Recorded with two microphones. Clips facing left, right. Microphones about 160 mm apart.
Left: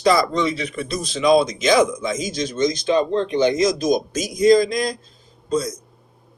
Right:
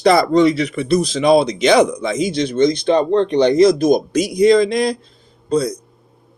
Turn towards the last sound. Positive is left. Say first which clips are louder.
# right 5 dB
turn(degrees=-65)  # may be behind; listen again after turning